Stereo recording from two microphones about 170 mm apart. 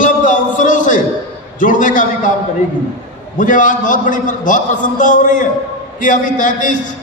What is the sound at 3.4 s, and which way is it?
A man's voice, 50° left (ahead or behind).